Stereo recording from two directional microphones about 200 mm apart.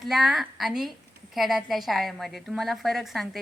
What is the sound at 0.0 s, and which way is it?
A woman's voice, centre (ahead or behind).